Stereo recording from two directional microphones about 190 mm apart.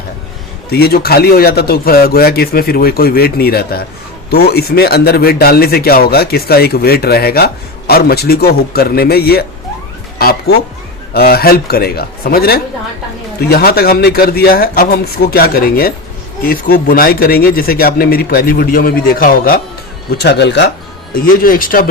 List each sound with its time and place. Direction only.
0.7 s a man's voice: 55° left (ahead or behind)
21.1 s speech: 50° left (ahead or behind)